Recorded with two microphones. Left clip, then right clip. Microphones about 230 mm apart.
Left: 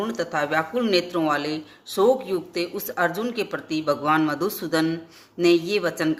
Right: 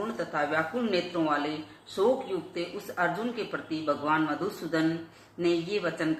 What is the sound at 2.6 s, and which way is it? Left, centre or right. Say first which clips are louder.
A man's voice: left 5 dB; left.